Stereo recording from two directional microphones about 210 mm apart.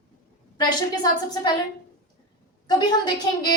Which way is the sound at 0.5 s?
20° left (ahead or behind).